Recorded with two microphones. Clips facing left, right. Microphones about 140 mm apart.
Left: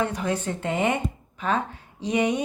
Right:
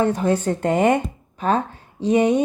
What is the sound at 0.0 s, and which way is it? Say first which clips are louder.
Speech: right 7 dB; 30° right (ahead or behind).